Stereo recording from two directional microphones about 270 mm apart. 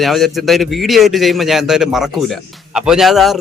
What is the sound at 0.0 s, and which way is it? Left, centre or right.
A man's voice, centre.